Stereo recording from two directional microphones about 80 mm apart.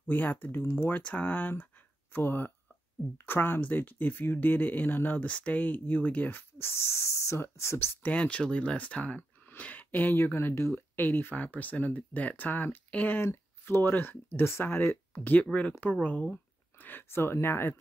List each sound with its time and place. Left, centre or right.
0.1 s speech: left
8.1 s speech: centre